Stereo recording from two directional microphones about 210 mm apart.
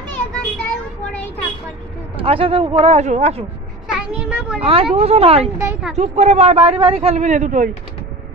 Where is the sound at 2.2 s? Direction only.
25° right (ahead or behind).